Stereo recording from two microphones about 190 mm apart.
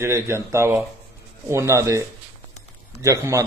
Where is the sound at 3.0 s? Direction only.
15° right (ahead or behind).